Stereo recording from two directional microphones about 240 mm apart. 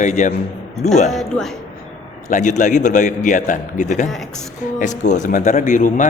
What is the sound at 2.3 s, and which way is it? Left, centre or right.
A man's voice, left.